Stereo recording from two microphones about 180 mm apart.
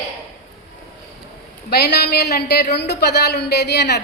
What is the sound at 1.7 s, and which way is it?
A woman's voice, 65° left (ahead or behind).